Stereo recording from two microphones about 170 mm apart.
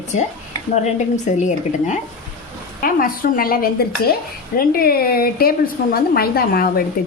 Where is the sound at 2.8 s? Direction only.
55° left (ahead or behind).